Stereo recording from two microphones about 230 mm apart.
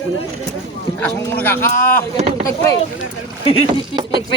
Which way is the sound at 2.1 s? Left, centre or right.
Right.